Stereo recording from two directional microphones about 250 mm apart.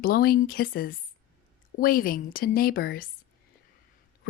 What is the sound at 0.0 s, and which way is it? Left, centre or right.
Speech, left.